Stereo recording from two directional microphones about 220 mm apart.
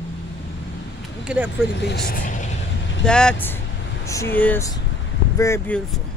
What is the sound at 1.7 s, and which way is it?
Speech, 50° left (ahead or behind).